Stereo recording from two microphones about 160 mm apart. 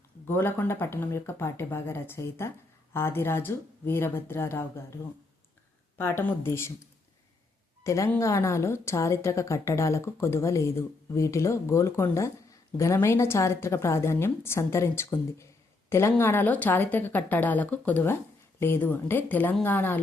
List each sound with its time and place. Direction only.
0.3 s a woman's voice: 15° left (ahead or behind)
6.0 s a woman's voice: 15° left (ahead or behind)
7.9 s a woman's voice: 20° left (ahead or behind)